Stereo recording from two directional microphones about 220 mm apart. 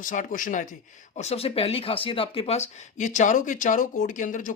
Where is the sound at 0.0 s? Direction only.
35° left (ahead or behind).